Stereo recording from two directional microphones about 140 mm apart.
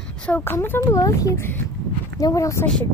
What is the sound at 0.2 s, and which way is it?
Speech, 15° left (ahead or behind).